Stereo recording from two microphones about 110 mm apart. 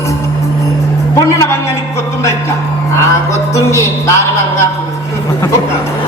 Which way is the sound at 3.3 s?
25° left (ahead or behind).